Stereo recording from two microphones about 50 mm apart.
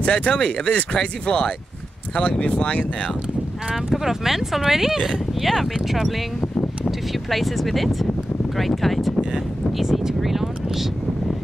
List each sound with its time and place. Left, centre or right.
0.0 s speech: left
3.7 s speech: centre